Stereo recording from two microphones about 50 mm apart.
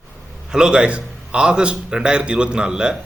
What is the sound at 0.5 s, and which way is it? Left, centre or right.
A man's voice, centre.